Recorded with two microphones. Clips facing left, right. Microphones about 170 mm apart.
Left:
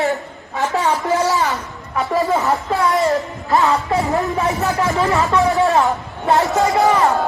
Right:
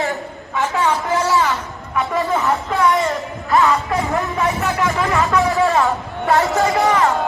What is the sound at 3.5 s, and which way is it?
Music, 25° left (ahead or behind).